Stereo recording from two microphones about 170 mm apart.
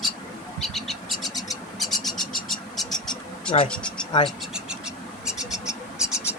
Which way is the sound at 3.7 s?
5° left (ahead or behind).